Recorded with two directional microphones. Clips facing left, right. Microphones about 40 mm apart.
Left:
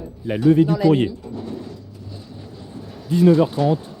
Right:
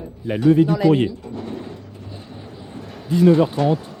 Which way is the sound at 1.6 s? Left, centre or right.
Right.